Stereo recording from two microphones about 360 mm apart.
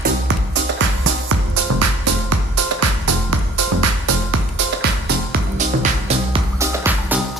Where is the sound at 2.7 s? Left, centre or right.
Right.